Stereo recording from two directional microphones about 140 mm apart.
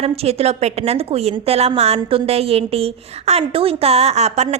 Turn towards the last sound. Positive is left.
turn(degrees=-50)  # may be behind; listen again after turning